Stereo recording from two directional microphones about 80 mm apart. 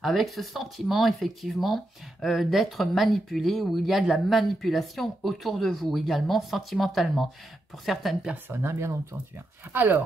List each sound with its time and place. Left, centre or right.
0.0 s speech: centre
8.5 s speech: right